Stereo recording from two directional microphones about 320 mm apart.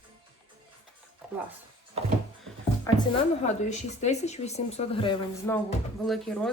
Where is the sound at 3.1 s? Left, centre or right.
Left.